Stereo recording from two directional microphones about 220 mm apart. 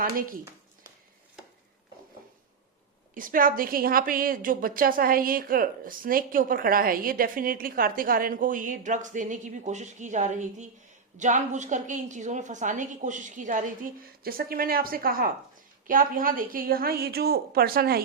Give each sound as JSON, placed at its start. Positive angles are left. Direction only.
{"t": 3.2, "sound": "a woman's voice", "side_deg": -40}